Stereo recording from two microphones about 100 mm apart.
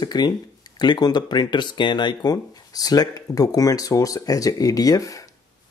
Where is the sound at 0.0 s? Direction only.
45° left (ahead or behind).